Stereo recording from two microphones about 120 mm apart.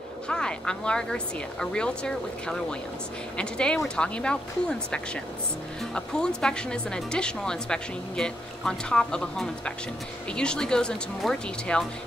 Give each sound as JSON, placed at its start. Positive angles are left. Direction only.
{"t": 0.3, "sound": "speech", "side_deg": 5}